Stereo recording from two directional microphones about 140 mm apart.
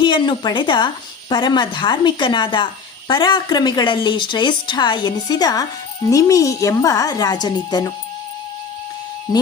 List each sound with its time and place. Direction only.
0.0 s a woman's voice: 35° left (ahead or behind)